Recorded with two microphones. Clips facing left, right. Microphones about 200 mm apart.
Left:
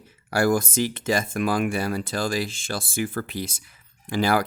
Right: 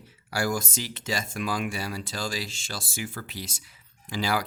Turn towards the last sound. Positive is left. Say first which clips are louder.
# left 6 dB
turn(degrees=55)  # may be behind; listen again after turning